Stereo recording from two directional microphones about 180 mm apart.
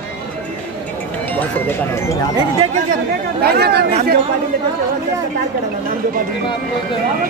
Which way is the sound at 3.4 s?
60° right (ahead or behind).